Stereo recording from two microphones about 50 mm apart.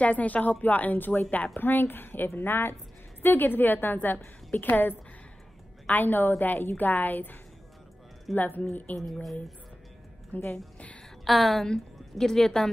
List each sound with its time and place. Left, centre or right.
0.0 s a woman's voice: left
1.6 s a woman's voice: left
8.4 s a woman's voice: left
9.1 s a woman's voice: centre
10.3 s a woman's voice: left
11.2 s a woman's voice: centre